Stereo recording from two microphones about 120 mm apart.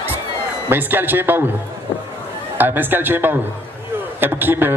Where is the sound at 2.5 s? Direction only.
15° right (ahead or behind).